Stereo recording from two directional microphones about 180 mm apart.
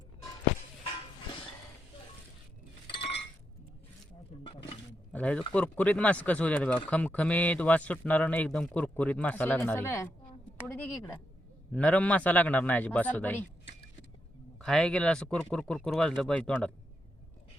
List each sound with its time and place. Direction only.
4.4 s a sound: 30° left (ahead or behind)
5.1 s speech: 5° left (ahead or behind)
14.6 s speech: 5° left (ahead or behind)